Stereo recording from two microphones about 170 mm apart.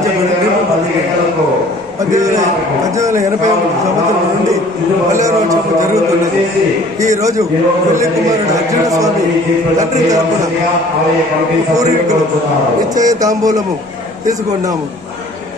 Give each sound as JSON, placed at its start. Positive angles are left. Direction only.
{"t": 3.0, "sound": "speech", "side_deg": -20}
{"t": 5.1, "sound": "a man's voice", "side_deg": -20}
{"t": 11.7, "sound": "a man's voice", "side_deg": -20}